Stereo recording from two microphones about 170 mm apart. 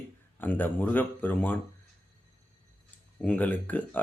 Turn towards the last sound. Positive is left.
turn(degrees=10)  # may be behind; listen again after turning